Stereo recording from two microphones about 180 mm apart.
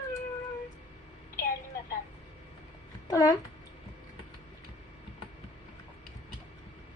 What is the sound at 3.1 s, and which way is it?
Speech, 20° left (ahead or behind).